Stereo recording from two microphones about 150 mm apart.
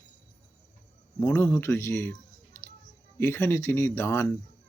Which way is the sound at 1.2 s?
15° left (ahead or behind).